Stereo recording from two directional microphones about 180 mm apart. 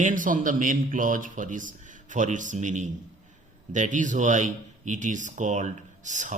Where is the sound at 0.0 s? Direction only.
45° right (ahead or behind).